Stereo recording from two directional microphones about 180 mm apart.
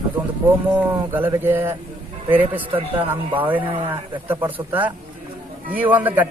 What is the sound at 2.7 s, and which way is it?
Speech, 30° right (ahead or behind).